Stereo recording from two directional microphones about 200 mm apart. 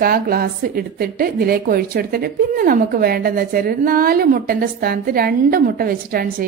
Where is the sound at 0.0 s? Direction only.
50° right (ahead or behind).